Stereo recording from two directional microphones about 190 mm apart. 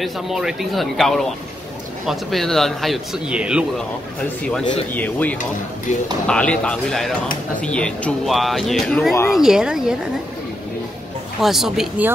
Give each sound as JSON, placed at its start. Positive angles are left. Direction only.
{"t": 0.0, "sound": "speech", "side_deg": 0}
{"t": 4.9, "sound": "speech", "side_deg": 10}
{"t": 5.9, "sound": "speech", "side_deg": 40}
{"t": 6.2, "sound": "speech", "side_deg": 5}
{"t": 9.3, "sound": "speech", "side_deg": 0}
{"t": 11.4, "sound": "speech", "side_deg": 0}